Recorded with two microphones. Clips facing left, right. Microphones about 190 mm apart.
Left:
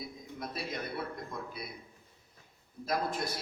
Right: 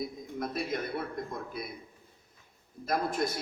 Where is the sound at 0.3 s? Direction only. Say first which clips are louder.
Right 6 dB; 50° right (ahead or behind).